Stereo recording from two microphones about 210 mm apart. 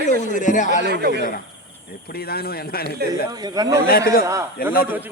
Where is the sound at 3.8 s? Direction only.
45° left (ahead or behind).